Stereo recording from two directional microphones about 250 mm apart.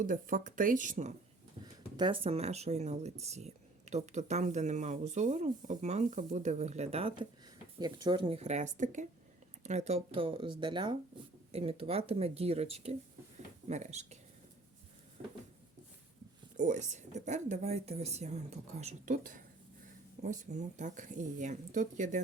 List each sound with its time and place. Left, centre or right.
0.0 s speech: right
1.6 s speech: centre
16.6 s speech: right